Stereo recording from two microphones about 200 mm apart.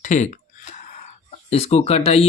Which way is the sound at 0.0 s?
35° left (ahead or behind).